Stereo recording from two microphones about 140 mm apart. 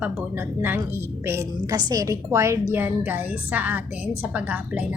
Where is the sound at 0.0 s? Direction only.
15° right (ahead or behind).